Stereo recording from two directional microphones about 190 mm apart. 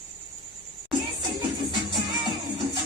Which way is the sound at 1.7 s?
20° right (ahead or behind).